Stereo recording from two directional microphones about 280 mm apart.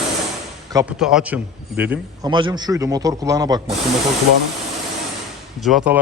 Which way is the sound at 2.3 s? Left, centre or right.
Centre.